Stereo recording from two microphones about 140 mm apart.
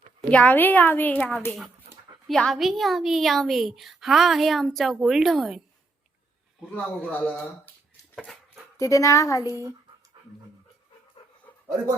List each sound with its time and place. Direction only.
0.3 s a woman's voice: 10° left (ahead or behind)
6.7 s a woman's voice: 10° left (ahead or behind)
8.1 s a sound: centre (ahead or behind)
8.8 s speech: 20° left (ahead or behind)
9.5 s speech: 20° right (ahead or behind)